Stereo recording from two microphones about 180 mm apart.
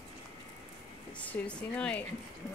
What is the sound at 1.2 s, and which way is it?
Speech, 5° left (ahead or behind).